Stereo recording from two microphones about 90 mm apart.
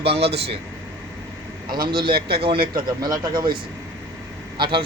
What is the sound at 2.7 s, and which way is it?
Speech, 45° right (ahead or behind).